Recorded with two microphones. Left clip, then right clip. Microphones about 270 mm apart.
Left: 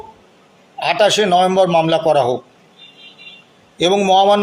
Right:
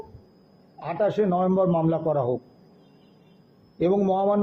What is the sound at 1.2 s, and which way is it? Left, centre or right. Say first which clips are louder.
Speech: left 10 dB; left.